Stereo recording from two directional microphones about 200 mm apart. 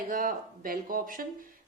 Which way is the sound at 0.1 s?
45° right (ahead or behind).